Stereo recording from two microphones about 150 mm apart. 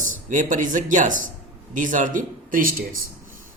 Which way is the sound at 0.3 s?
55° right (ahead or behind).